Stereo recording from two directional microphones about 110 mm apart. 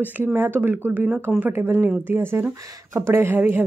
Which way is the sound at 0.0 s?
15° right (ahead or behind).